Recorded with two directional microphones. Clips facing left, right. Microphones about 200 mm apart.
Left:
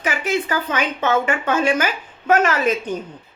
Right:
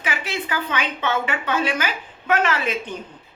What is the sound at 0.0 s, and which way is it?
A woman's voice, 45° left (ahead or behind).